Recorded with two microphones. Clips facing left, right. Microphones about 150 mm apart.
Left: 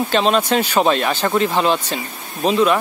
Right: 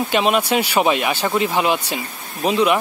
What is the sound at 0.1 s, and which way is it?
Speech, 10° right (ahead or behind).